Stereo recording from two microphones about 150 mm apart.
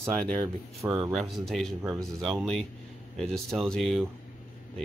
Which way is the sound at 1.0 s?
Centre (ahead or behind).